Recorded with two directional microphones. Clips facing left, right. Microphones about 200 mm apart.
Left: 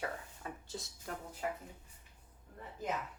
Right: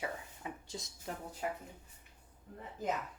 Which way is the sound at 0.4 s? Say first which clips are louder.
Right 1 dB; 15° right (ahead or behind).